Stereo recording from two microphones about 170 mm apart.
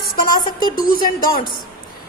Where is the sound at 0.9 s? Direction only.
60° left (ahead or behind).